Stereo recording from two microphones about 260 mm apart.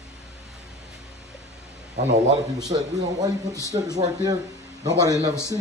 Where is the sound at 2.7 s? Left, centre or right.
Centre.